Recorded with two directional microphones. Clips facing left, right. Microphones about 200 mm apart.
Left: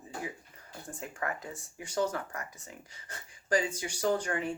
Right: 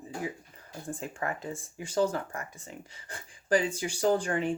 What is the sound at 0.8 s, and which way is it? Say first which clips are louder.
Speech: right 3 dB; 30° right (ahead or behind).